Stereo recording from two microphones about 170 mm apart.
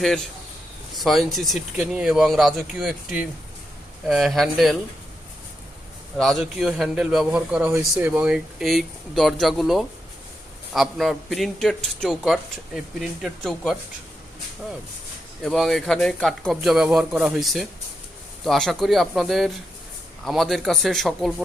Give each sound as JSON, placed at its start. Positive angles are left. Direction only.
{"t": 0.0, "sound": "speech", "side_deg": 0}
{"t": 6.1, "sound": "speech", "side_deg": 0}
{"t": 15.4, "sound": "speech", "side_deg": 0}